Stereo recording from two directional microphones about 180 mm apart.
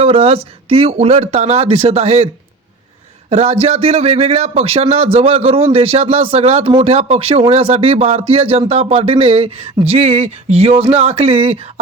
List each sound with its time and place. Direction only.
0.0 s speech: 30° right (ahead or behind)